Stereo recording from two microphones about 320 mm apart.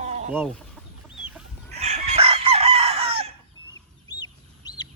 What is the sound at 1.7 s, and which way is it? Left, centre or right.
Chicken, centre.